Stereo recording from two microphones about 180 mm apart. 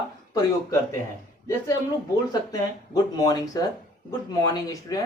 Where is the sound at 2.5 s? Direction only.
20° left (ahead or behind).